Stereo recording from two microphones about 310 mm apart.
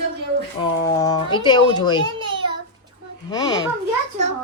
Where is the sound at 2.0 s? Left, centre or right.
Centre.